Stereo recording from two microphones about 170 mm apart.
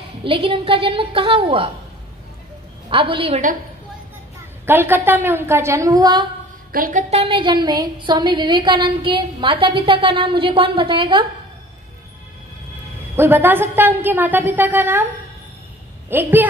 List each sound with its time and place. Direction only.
0.2 s a woman's voice: 30° right (ahead or behind)
2.9 s a woman's voice: 30° right (ahead or behind)
4.6 s a woman's voice: 10° right (ahead or behind)
6.7 s a woman's voice: 55° right (ahead or behind); by 11.2 s 30° right (ahead or behind)
13.1 s a woman's voice: 15° right (ahead or behind)
16.1 s a woman's voice: 10° right (ahead or behind)